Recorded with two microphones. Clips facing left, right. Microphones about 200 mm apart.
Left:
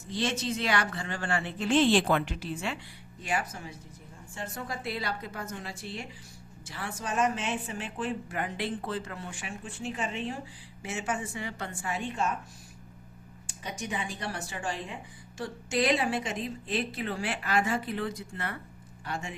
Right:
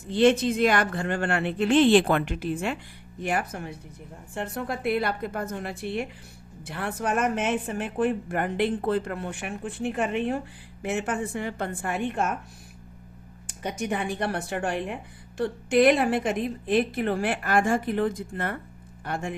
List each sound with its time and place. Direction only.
0.1 s a woman's voice: 60° right (ahead or behind)
13.6 s a woman's voice: 60° right (ahead or behind)